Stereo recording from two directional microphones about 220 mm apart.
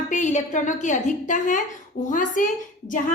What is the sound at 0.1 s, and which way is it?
A woman's voice, 35° left (ahead or behind).